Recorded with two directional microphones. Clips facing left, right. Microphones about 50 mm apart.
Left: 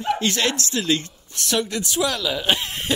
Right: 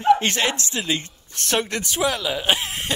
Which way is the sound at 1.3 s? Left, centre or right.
Right.